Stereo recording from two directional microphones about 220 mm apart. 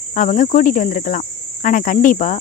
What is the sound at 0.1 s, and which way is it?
Speech, 35° left (ahead or behind).